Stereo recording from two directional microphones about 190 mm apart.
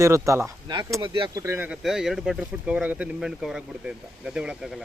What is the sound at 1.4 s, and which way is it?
Speech, 10° right (ahead or behind).